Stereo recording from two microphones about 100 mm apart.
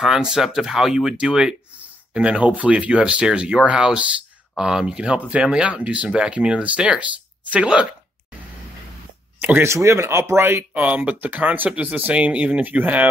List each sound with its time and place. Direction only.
0.0 s speech: 5° right (ahead or behind)
9.4 s speech: 15° right (ahead or behind)
9.7 s speech: 30° right (ahead or behind)